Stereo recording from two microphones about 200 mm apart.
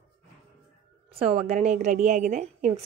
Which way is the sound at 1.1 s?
30° right (ahead or behind).